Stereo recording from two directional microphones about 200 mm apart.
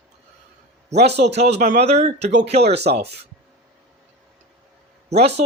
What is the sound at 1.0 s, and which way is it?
Speech, 30° right (ahead or behind).